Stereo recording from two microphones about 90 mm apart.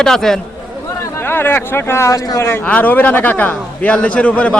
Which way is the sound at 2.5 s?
20° left (ahead or behind).